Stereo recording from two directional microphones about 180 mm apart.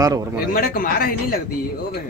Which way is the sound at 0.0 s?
20° right (ahead or behind).